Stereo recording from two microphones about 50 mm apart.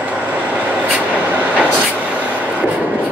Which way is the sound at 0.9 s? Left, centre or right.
Right.